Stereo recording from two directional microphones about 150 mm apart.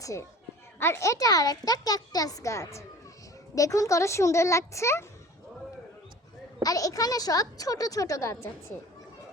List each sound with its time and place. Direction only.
0.0 s a woman's voice: 20° left (ahead or behind)
6.6 s a child's voice: 25° left (ahead or behind)